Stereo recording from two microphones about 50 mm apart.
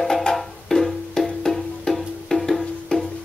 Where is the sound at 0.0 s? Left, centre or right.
Centre.